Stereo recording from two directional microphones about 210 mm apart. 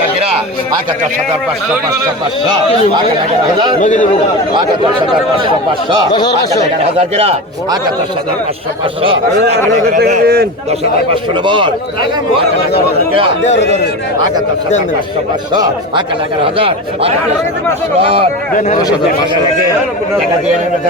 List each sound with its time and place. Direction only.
3.8 s a man's voice: 35° left (ahead or behind)
4.5 s speech: 20° right (ahead or behind)
6.1 s speech: 20° left (ahead or behind)
6.9 s speech: 30° right (ahead or behind)
9.9 s speech: 40° right (ahead or behind)
10.7 s speech: 25° right (ahead or behind)
15.5 s speech: 20° right (ahead or behind)